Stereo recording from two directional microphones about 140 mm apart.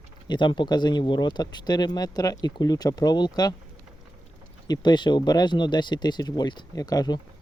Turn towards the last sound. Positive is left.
turn(degrees=30)  # may be behind; listen again after turning